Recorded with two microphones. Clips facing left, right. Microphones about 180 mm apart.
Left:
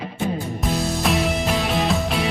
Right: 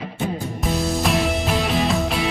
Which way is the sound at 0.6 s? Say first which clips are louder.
Right 1 dB; centre (ahead or behind).